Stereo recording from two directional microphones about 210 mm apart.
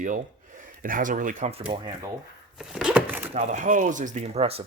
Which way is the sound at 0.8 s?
40° right (ahead or behind).